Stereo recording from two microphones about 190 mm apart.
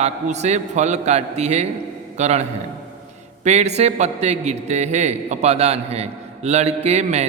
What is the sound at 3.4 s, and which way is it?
A man's voice, 35° right (ahead or behind).